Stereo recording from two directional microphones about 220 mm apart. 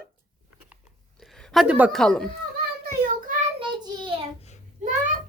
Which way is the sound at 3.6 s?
20° right (ahead or behind).